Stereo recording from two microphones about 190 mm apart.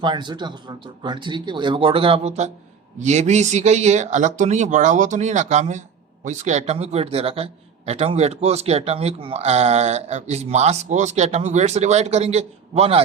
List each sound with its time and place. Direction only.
0.0 s speech: 25° right (ahead or behind)